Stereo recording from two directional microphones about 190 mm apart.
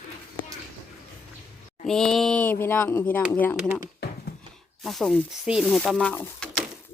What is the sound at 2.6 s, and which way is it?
Speech, 10° left (ahead or behind).